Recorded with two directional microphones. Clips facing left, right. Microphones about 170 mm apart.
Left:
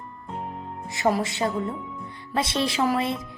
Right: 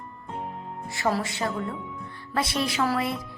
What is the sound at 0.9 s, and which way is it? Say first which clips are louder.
A woman's voice: left 3 dB; 20° left (ahead or behind).